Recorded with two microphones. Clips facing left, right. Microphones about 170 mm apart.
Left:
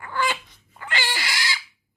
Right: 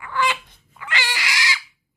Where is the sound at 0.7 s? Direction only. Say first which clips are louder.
Right 1 dB; 40° left (ahead or behind).